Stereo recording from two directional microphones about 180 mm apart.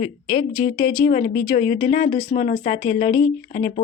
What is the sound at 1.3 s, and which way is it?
Speech, 30° left (ahead or behind).